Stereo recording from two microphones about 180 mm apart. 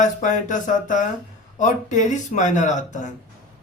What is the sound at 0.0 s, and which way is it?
Speech, 45° left (ahead or behind).